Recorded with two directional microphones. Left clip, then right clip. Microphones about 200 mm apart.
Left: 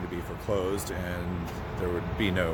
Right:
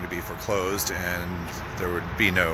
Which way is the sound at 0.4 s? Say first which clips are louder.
Right 3 dB; 10° right (ahead or behind).